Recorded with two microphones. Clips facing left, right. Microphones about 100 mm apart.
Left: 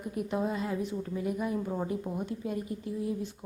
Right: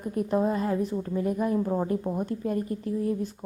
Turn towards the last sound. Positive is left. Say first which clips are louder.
# right 5 dB
turn(degrees=-50)  # may be behind; listen again after turning